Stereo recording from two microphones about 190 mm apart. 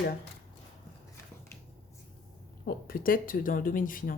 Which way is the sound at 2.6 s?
50° left (ahead or behind).